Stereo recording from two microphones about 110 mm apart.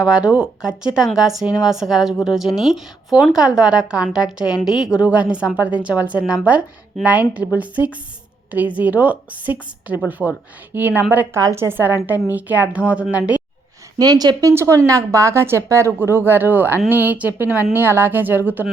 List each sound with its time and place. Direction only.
0.0 s a woman's voice: 10° right (ahead or behind)
11.3 s a woman's voice: 25° right (ahead or behind); by 13.4 s 10° right (ahead or behind)
14.0 s speech: 35° right (ahead or behind)
14.5 s a woman's voice: 25° right (ahead or behind)